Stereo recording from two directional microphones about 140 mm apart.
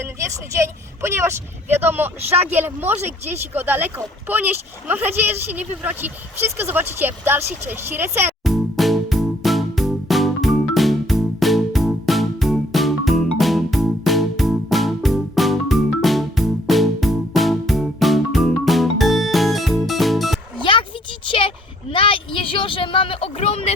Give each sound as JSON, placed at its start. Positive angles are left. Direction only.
{"t": 0.0, "sound": "speech", "side_deg": -20}
{"t": 8.4, "sound": "music", "side_deg": 0}
{"t": 20.6, "sound": "a sound", "side_deg": 35}
{"t": 21.2, "sound": "vehicle", "side_deg": 40}